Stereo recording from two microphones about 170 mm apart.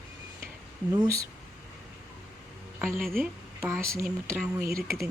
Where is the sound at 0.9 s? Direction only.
20° right (ahead or behind).